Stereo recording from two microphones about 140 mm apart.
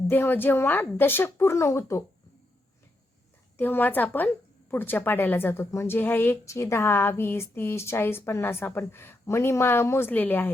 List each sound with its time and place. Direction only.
0.1 s a woman's voice: 15° left (ahead or behind)
3.6 s a woman's voice: 15° left (ahead or behind)